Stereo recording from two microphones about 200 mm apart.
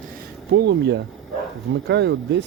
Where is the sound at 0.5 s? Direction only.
60° right (ahead or behind).